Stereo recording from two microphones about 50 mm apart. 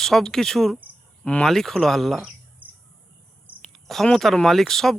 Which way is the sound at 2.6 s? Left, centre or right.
Right.